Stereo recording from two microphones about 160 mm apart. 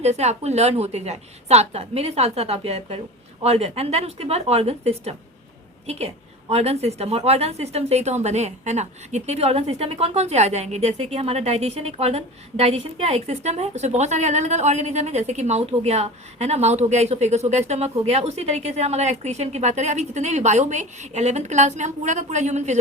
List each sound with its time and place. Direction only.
0.0 s a woman's voice: 45° right (ahead or behind)